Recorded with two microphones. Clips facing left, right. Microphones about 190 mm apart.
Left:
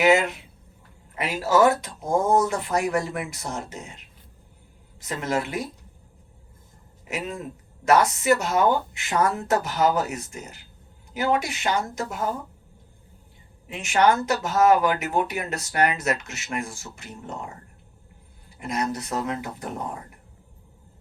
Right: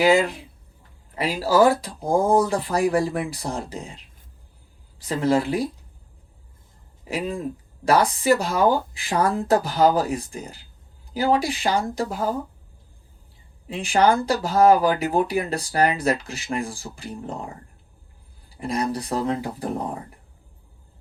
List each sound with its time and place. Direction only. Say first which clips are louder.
0.0 s speech: right 1 dB; 30° right (ahead or behind)
7.1 s speech: right 4 dB; 30° right (ahead or behind)
13.7 s speech: right 1 dB; 30° right (ahead or behind)